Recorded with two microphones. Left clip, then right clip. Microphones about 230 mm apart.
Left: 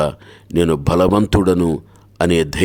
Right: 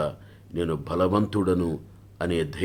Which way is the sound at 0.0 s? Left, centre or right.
Left.